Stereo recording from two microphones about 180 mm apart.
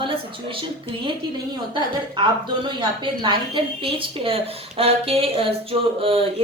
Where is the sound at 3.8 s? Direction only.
30° right (ahead or behind).